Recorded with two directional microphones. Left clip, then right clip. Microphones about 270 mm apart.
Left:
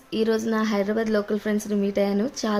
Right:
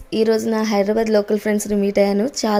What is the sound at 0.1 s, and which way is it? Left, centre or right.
A woman's voice, centre.